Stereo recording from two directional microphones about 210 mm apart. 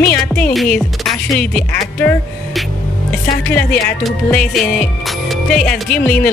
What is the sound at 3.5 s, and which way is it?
Speech, 5° left (ahead or behind).